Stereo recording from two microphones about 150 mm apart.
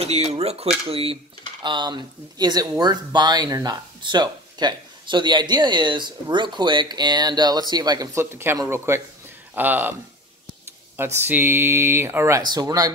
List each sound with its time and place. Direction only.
0.0 s speech: 45° right (ahead or behind); by 9.9 s 10° right (ahead or behind)
11.1 s speech: 15° right (ahead or behind)